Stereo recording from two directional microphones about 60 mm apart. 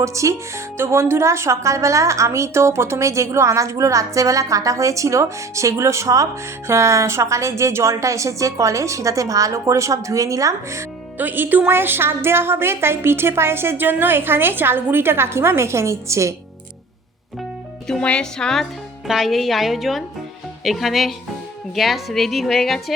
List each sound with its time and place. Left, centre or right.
0.0 s speech: right
11.2 s a woman's voice: right
18.0 s speech: centre
19.0 s a woman's voice: centre